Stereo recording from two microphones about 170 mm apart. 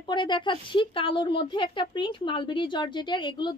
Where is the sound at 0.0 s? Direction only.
25° left (ahead or behind).